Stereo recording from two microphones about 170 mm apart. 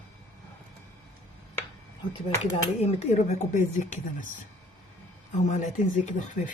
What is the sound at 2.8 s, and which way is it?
Speech, 40° left (ahead or behind).